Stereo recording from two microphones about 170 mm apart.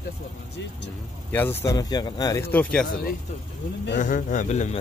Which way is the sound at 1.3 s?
15° left (ahead or behind).